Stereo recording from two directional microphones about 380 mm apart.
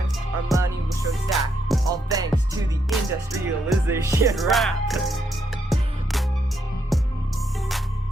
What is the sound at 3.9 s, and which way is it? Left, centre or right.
Music, centre.